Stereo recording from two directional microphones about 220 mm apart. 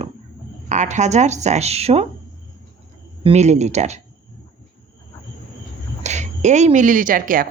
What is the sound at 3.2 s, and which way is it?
Speech, 30° right (ahead or behind).